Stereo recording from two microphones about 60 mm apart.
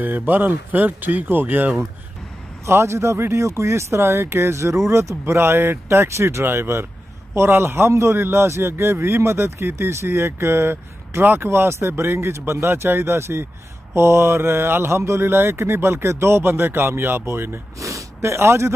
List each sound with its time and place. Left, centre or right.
0.3 s speech: right
2.6 s a man's voice: right
17.7 s snort: right